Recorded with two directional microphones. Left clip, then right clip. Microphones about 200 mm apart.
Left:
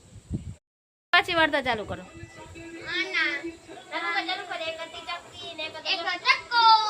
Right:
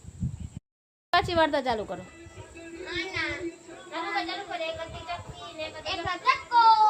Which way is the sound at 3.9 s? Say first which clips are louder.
Left 3 dB; centre (ahead or behind).